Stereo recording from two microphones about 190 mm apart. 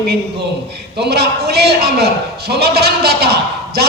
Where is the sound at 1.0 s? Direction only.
60° right (ahead or behind).